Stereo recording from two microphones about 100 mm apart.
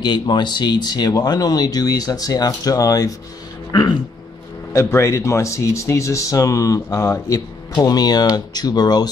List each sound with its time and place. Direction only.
0.0 s speech: 50° left (ahead or behind)
4.7 s speech: 30° left (ahead or behind)